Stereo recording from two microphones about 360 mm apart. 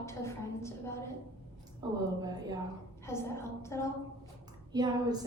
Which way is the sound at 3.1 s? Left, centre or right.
Centre.